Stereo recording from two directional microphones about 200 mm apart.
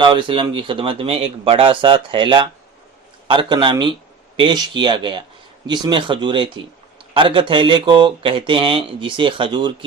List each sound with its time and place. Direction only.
0.0 s speech: 25° right (ahead or behind)